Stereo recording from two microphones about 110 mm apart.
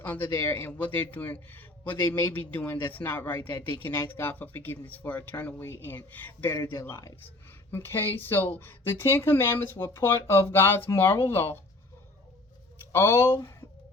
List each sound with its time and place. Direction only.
0.0 s a man's voice: 15° left (ahead or behind)
12.9 s speech: 25° left (ahead or behind)